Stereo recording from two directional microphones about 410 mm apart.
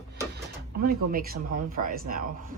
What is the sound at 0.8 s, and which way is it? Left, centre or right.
Speech, right.